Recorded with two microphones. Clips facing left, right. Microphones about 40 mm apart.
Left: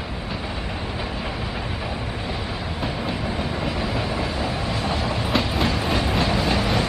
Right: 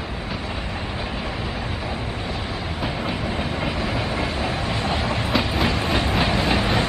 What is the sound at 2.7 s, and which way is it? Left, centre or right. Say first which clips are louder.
Train: right 1 dB; centre.